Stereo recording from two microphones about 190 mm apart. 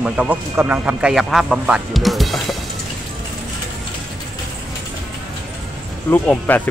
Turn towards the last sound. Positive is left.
turn(degrees=10)  # may be behind; listen again after turning